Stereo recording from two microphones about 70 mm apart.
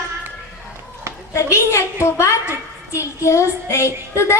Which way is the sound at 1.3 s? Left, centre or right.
Left.